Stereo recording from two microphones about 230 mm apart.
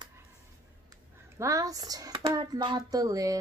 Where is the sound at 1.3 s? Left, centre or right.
Centre.